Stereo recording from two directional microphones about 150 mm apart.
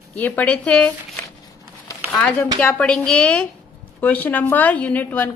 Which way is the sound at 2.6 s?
5° left (ahead or behind).